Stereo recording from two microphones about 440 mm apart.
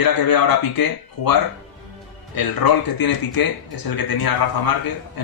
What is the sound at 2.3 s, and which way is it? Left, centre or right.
Speech, left.